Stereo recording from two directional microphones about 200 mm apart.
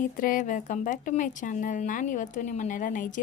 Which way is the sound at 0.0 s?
40° left (ahead or behind).